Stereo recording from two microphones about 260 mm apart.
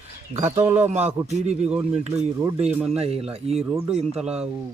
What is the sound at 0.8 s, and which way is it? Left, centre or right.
Speech, right.